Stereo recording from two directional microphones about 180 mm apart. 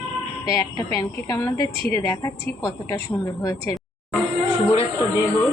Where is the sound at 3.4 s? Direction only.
15° left (ahead or behind).